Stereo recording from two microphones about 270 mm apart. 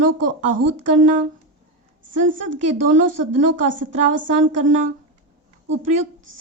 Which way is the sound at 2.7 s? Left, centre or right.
Right.